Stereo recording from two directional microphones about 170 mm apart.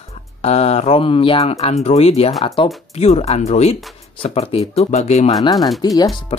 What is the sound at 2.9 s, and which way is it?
Speech, 40° left (ahead or behind).